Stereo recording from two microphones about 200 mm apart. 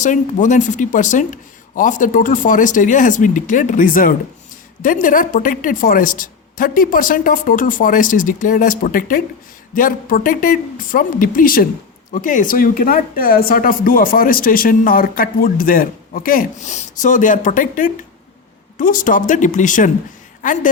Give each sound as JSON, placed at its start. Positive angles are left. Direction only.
{"t": 0.0, "sound": "a woman's voice", "side_deg": 40}